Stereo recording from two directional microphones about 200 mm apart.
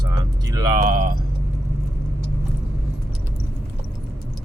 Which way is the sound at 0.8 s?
45° right (ahead or behind).